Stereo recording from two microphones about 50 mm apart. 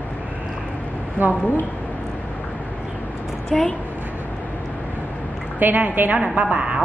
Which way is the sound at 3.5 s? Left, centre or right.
Centre.